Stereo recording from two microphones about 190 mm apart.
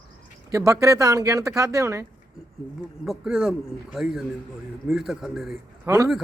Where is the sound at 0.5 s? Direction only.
15° right (ahead or behind).